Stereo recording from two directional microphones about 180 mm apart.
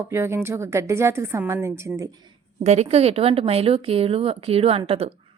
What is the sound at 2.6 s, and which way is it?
Speech, 40° right (ahead or behind).